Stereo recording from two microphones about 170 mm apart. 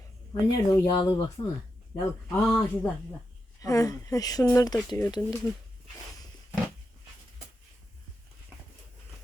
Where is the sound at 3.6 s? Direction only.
20° left (ahead or behind).